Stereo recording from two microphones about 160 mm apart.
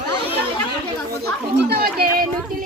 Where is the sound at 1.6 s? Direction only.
80° right.